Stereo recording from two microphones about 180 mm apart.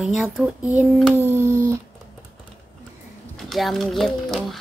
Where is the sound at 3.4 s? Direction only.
Centre (ahead or behind).